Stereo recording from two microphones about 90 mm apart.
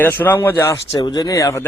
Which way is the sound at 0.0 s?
20° left (ahead or behind).